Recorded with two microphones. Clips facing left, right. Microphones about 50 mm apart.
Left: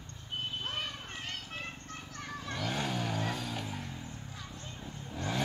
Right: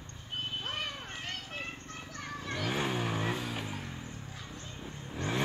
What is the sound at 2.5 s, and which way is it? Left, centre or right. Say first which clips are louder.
Vehicle: right 2 dB; centre.